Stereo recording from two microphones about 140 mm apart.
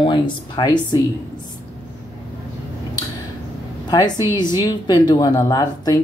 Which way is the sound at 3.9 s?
25° left (ahead or behind).